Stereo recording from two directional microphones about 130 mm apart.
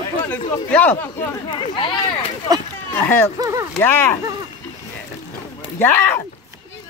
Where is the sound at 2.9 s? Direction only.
15° left (ahead or behind).